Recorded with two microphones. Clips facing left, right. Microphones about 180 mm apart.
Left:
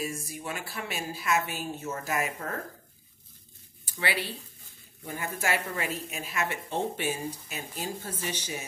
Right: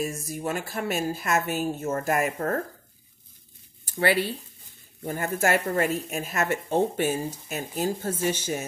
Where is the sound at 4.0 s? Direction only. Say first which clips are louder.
Right 8 dB; 45° right (ahead or behind).